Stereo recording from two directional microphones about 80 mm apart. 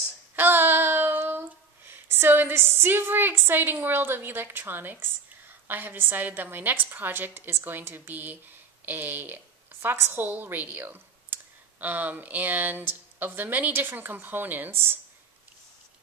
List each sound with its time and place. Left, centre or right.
0.4 s child singing: right
1.9 s a woman's voice: right